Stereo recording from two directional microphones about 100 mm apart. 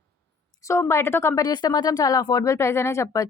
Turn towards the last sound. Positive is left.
turn(degrees=30)  # may be behind; listen again after turning